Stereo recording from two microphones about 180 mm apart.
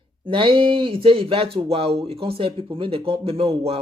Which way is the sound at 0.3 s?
30° right (ahead or behind).